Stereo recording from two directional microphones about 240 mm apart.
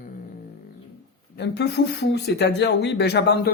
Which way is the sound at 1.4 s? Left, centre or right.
Left.